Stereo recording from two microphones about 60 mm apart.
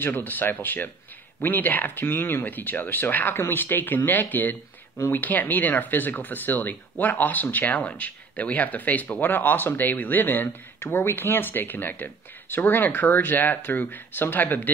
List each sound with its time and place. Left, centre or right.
0.0 s speech: left